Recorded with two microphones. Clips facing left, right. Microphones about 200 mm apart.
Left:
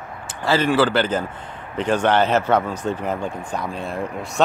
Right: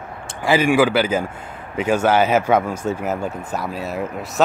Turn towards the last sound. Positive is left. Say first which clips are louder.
# right 1 dB
turn(degrees=-5)  # may be behind; listen again after turning